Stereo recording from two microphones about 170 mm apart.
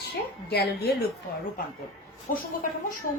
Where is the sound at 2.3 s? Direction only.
55° left (ahead or behind).